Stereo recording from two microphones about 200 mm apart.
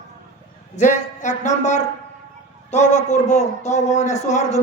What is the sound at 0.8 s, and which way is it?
A man's voice, 35° left (ahead or behind).